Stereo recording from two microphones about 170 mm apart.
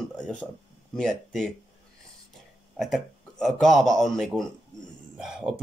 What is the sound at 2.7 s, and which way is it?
Speech, centre (ahead or behind).